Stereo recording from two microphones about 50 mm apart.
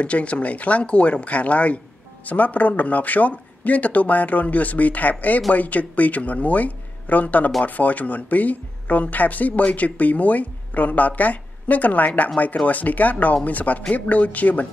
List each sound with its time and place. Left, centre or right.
0.0 s speech: left